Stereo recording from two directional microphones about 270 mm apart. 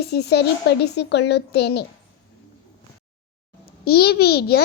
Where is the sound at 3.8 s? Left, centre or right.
Left.